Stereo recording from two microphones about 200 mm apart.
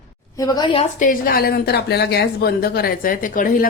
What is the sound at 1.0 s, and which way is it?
Speech, 45° left (ahead or behind).